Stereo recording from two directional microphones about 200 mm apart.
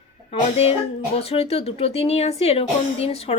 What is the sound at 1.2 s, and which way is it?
A woman's voice, 30° left (ahead or behind).